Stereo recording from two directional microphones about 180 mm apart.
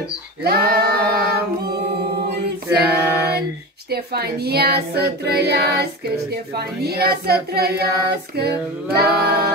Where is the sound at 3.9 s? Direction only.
60° right (ahead or behind).